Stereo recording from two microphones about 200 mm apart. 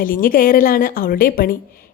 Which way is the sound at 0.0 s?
45° left (ahead or behind).